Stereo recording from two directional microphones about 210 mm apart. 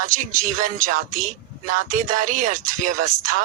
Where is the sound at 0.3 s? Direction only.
40° right (ahead or behind).